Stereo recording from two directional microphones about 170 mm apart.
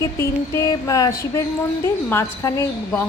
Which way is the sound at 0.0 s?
15° left (ahead or behind).